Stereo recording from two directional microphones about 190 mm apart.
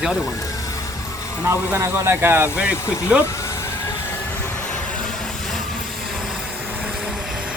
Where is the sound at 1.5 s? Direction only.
15° right (ahead or behind).